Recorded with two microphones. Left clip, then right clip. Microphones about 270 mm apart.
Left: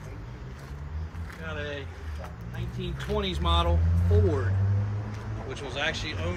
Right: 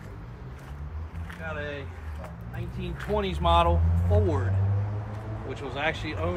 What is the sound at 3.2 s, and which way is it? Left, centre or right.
Speech, right.